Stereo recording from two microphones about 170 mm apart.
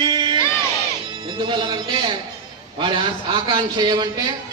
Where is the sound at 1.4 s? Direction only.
25° right (ahead or behind).